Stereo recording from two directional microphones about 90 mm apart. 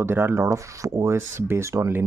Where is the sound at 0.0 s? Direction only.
25° right (ahead or behind).